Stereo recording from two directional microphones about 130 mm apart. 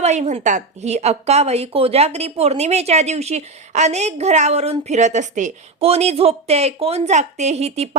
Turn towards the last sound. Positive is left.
turn(degrees=-55)  # may be behind; listen again after turning